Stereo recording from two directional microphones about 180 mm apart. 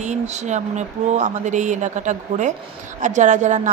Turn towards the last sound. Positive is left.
turn(degrees=-40)  # may be behind; listen again after turning